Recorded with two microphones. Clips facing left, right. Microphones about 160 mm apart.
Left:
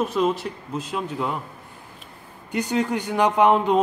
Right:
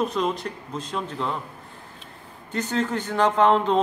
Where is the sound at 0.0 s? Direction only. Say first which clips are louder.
Left 3 dB; 5° left (ahead or behind).